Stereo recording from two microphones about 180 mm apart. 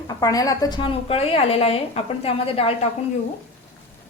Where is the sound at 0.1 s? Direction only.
20° left (ahead or behind).